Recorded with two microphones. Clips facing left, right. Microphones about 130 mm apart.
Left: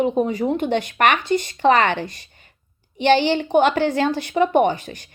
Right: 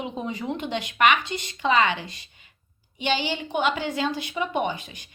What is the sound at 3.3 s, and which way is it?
A woman's voice, 50° left (ahead or behind).